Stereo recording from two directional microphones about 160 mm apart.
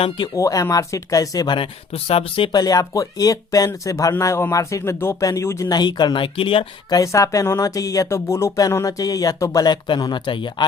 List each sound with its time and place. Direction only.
0.3 s speech: 20° left (ahead or behind)
7.0 s speech: 20° left (ahead or behind)